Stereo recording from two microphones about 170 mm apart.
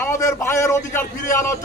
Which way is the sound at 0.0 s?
15° left (ahead or behind).